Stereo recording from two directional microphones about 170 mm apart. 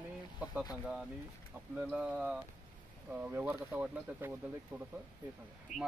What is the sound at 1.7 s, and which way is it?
Speech, 10° right (ahead or behind).